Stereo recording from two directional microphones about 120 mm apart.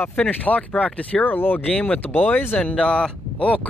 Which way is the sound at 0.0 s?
15° left (ahead or behind).